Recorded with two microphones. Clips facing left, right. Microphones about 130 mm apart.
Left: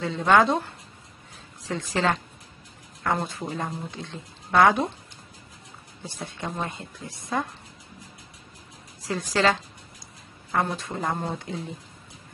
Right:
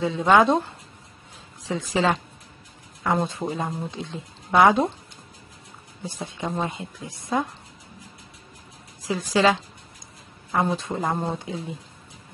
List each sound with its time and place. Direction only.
0.0 s a woman's voice: 15° right (ahead or behind)
1.7 s a woman's voice: 10° right (ahead or behind)
6.0 s a woman's voice: 15° right (ahead or behind)
9.3 s a woman's voice: 15° right (ahead or behind)
10.6 s a woman's voice: 20° right (ahead or behind)